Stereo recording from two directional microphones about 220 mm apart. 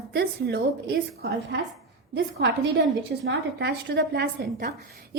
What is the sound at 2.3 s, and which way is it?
A woman's voice, 50° right (ahead or behind).